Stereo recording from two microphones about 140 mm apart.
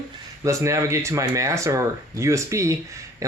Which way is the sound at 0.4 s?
20° right (ahead or behind).